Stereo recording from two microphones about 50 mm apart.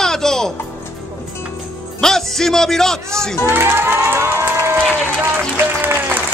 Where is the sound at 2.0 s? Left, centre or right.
Centre.